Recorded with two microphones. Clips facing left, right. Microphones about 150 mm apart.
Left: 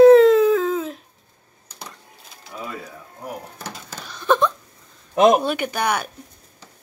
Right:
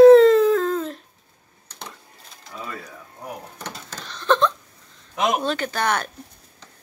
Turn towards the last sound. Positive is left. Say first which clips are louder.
# left 1 dB
turn(degrees=10)  # may be behind; listen again after turning